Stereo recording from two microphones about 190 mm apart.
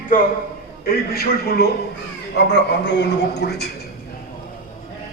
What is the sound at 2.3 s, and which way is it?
A man's voice, 65° left (ahead or behind).